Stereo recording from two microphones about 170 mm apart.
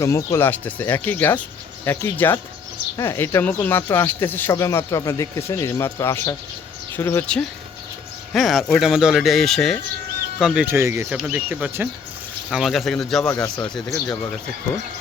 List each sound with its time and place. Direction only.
0.0 s speech: 20° left (ahead or behind); by 13.3 s centre (ahead or behind)
13.7 s speech: 25° left (ahead or behind)